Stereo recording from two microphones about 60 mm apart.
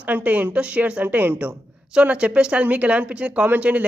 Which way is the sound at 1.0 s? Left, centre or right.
Right.